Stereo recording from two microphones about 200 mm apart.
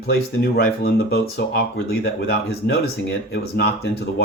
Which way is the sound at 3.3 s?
55° left (ahead or behind).